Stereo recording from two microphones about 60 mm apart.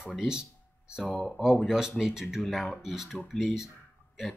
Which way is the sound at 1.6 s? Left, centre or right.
Centre.